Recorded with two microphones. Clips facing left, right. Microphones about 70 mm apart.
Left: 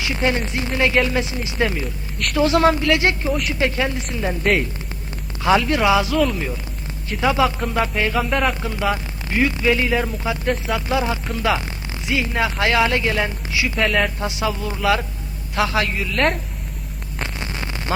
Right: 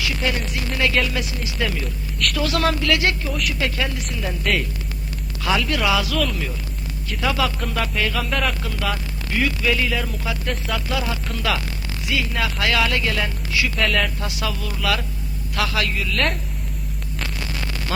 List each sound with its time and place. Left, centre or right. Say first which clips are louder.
0.0 s speech: left 3 dB; left
5.4 s speech: left 5 dB; left
8.3 s speech: left 4 dB; centre
8.6 s speech: left 4 dB; left
13.7 s speech: left 3 dB; centre
14.0 s speech: left 4 dB; left
17.2 s hum: left 2 dB; left